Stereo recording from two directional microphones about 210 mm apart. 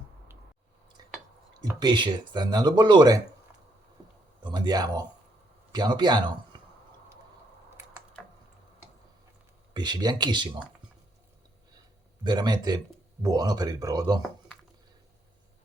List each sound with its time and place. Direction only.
1.6 s speech: 20° right (ahead or behind)
4.4 s speech: 20° right (ahead or behind)
7.8 s a sound: 10° right (ahead or behind)
9.7 s speech: 20° right (ahead or behind)
12.2 s speech: 20° right (ahead or behind)
14.2 s computer keyboard: 5° left (ahead or behind)